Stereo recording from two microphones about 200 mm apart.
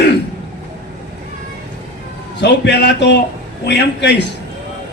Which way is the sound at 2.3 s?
60° left (ahead or behind).